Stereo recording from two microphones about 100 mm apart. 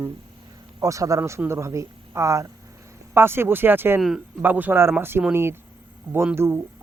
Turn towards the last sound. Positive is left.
turn(degrees=-25)  # may be behind; listen again after turning